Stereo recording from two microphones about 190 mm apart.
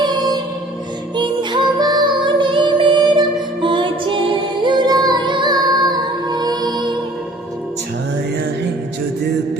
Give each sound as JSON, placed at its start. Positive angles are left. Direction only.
{"t": 1.1, "sound": "music", "side_deg": -25}